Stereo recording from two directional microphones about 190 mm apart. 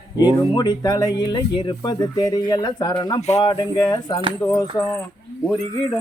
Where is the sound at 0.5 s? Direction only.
20° left (ahead or behind).